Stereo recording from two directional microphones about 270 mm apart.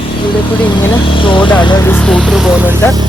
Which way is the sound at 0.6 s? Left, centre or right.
Centre.